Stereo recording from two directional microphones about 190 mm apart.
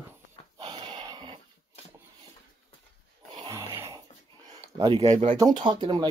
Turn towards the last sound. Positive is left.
turn(degrees=-25)  # may be behind; listen again after turning